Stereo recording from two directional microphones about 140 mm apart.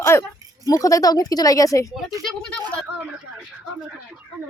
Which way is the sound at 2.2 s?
10° left (ahead or behind).